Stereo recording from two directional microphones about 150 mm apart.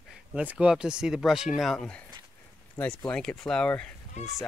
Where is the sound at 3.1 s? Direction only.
5° left (ahead or behind).